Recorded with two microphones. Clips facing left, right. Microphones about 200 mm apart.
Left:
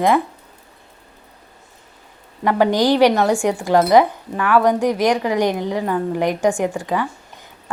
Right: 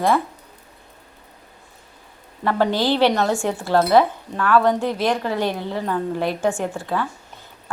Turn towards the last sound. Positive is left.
turn(degrees=15)  # may be behind; listen again after turning